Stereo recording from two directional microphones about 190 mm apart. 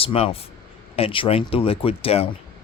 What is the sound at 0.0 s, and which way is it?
Speech, 30° left (ahead or behind).